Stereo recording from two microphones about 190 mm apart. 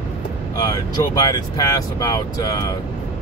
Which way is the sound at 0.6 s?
20° left (ahead or behind).